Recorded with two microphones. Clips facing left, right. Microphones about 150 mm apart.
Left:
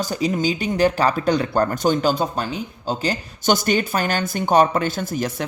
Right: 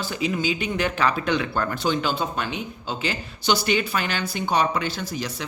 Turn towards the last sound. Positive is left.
turn(degrees=50)  # may be behind; listen again after turning